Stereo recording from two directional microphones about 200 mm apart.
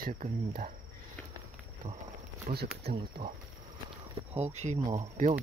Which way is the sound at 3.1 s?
50° right (ahead or behind).